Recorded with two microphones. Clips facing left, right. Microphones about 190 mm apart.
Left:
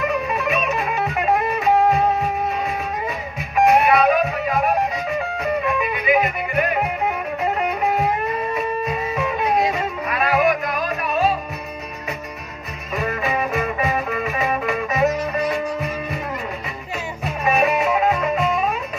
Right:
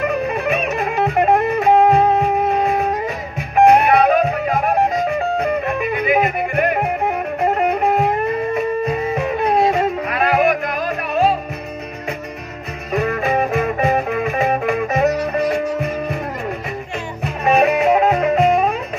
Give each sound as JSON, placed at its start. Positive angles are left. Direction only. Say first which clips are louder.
{"t": 0.0, "sound": "music", "louder": "right 3 dB", "side_deg": -55}
{"t": 9.1, "sound": "music", "louder": "right 1 dB", "side_deg": -55}
{"t": 12.9, "sound": "music", "louder": "right 5 dB", "side_deg": -50}
{"t": 17.2, "sound": "music", "louder": "right 4 dB", "side_deg": -55}